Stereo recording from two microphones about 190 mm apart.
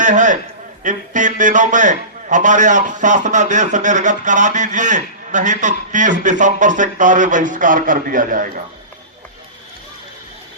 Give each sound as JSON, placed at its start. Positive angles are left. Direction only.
{"t": 0.0, "sound": "a man's voice", "side_deg": -40}